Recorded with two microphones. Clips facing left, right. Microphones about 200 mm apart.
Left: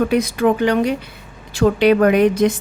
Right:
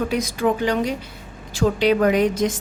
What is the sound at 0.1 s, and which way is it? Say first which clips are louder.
A woman's voice: left 5 dB; 60° left (ahead or behind).